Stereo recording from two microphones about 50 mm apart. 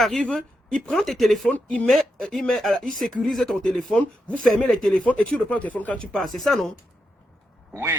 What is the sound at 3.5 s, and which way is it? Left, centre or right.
Speech, centre.